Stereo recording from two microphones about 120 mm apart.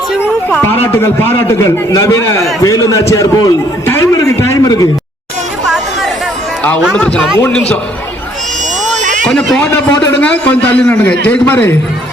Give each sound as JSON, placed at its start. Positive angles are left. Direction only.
{"t": 0.5, "sound": "a man's voice", "side_deg": 20}
{"t": 1.6, "sound": "a man's voice", "side_deg": 30}
{"t": 5.6, "sound": "chatter", "side_deg": 0}
{"t": 6.9, "sound": "a man's voice", "side_deg": 10}
{"t": 9.0, "sound": "a sound", "side_deg": -90}
{"t": 9.2, "sound": "a man's voice", "side_deg": 5}